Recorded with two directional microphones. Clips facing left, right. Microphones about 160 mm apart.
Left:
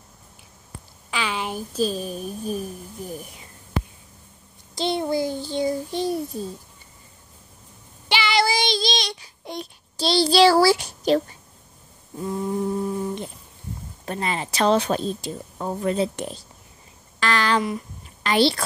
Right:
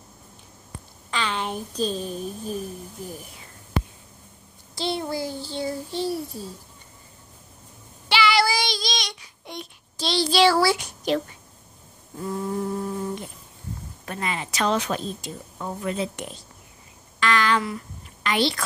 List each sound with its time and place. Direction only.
1.1 s a woman's voice: 10° left (ahead or behind)
4.7 s child singing: 20° left (ahead or behind)
6.3 s a child's voice: 20° left (ahead or behind)
8.1 s child singing: 20° left (ahead or behind)
12.2 s a sound: 15° left (ahead or behind)
14.0 s a woman's voice: 30° left (ahead or behind)
17.2 s a sound: 35° left (ahead or behind)
18.2 s a woman's voice: 35° left (ahead or behind)